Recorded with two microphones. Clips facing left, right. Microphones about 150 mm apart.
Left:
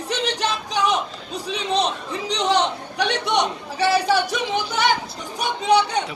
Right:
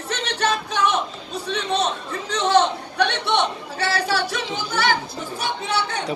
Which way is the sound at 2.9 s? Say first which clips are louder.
Even; 10° left (ahead or behind).